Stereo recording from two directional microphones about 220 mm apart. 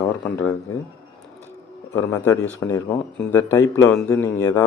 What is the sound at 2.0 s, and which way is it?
A man's voice, 15° left (ahead or behind).